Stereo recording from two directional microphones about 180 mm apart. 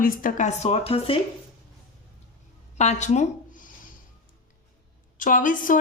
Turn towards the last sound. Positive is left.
turn(degrees=50)  # may be behind; listen again after turning